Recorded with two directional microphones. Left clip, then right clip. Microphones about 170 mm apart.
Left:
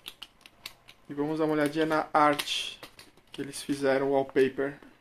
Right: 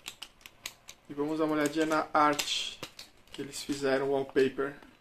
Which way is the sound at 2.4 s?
40° left (ahead or behind).